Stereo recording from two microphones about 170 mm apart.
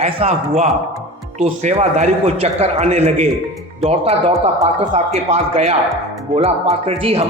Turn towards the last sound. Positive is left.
turn(degrees=-35)  # may be behind; listen again after turning